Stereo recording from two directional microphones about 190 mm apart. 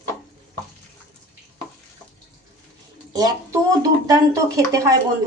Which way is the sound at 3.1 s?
20° right (ahead or behind).